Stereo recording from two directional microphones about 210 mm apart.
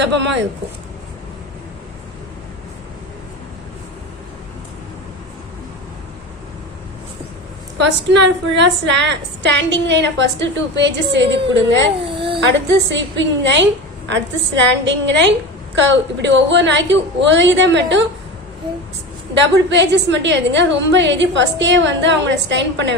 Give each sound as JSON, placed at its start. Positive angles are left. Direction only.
{"t": 0.0, "sound": "a woman's voice", "side_deg": -55}
{"t": 7.8, "sound": "a woman's voice", "side_deg": -60}
{"t": 12.0, "sound": "a sound", "side_deg": -25}
{"t": 12.4, "sound": "a woman's voice", "side_deg": -55}
{"t": 14.8, "sound": "a woman's voice", "side_deg": -60}
{"t": 19.3, "sound": "a woman's voice", "side_deg": -55}